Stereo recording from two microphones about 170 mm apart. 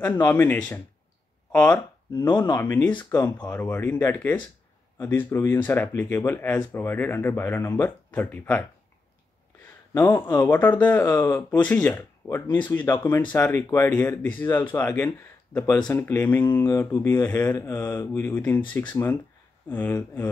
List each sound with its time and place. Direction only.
0.2 s speech: 10° left (ahead or behind)
2.1 s speech: 25° left (ahead or behind)
2.6 s speech: 15° left (ahead or behind)
9.9 s speech: 15° left (ahead or behind)
19.7 s speech: 10° left (ahead or behind)